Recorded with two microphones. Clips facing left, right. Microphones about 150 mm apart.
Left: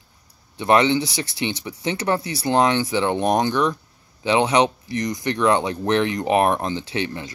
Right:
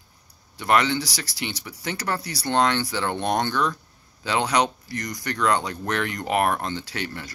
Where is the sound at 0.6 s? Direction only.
20° left (ahead or behind).